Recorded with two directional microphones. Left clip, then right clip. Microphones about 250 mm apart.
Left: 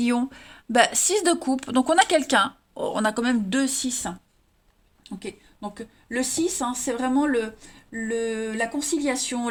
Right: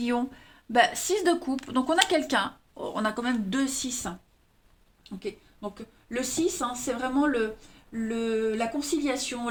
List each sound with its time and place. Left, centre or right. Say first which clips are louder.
0.0 s speech: left 4 dB; left